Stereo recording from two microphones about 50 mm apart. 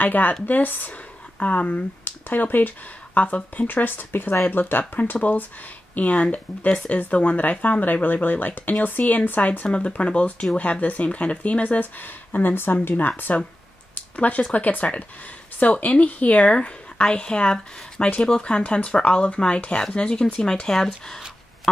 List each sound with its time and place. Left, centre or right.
0.0 s speech: left
13.9 s a sound: left
14.5 s a woman's voice: left; by 21.2 s centre